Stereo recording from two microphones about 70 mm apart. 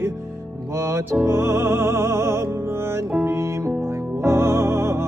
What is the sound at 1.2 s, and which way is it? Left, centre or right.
Music, right.